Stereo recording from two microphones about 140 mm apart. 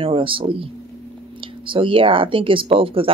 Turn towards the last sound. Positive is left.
turn(degrees=-40)  # may be behind; listen again after turning